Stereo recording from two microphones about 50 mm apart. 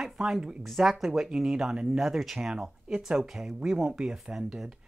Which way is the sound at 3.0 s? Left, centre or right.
Centre.